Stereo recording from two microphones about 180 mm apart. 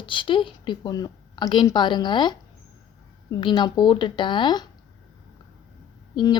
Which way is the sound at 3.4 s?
25° left (ahead or behind).